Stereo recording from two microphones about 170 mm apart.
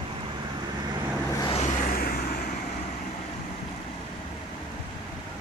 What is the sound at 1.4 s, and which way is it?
Vehicle, 35° left (ahead or behind).